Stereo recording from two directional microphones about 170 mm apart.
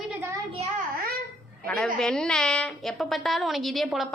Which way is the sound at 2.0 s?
5° left (ahead or behind).